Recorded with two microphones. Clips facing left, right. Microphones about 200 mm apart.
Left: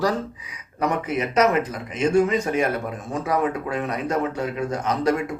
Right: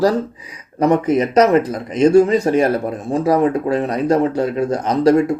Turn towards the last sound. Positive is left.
turn(degrees=-35)  # may be behind; listen again after turning